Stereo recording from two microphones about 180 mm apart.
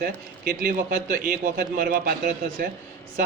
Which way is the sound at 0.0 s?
50° right (ahead or behind).